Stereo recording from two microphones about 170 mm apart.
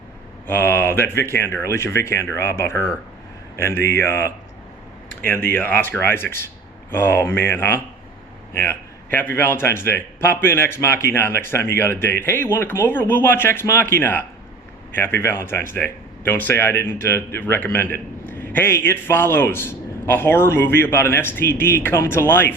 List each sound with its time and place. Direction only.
0.4 s a man's voice: 10° left (ahead or behind)
5.5 s a man's voice: 10° left (ahead or behind)